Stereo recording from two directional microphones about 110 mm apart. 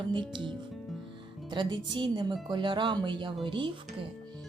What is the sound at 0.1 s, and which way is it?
Speech, 45° right (ahead or behind).